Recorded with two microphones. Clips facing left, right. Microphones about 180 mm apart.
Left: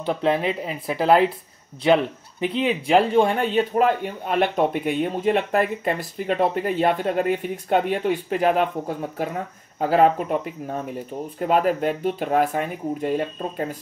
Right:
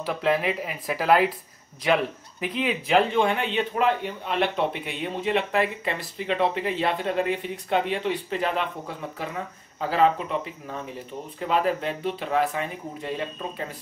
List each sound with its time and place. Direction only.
0.0 s speech: 30° left (ahead or behind)
2.4 s speech: 30° left (ahead or behind); by 13.7 s 45° left (ahead or behind)